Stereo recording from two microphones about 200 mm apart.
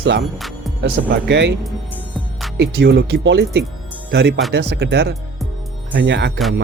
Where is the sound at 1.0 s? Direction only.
50° right (ahead or behind).